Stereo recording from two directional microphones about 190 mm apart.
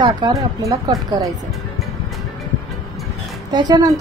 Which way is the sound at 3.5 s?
20° right (ahead or behind).